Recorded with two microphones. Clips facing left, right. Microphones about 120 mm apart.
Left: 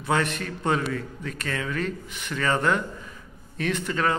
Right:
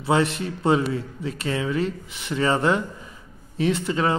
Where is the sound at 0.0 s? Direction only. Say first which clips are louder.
Right 4 dB; 25° right (ahead or behind).